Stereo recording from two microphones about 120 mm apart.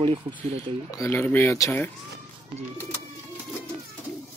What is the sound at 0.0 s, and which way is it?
Speech, 40° right (ahead or behind).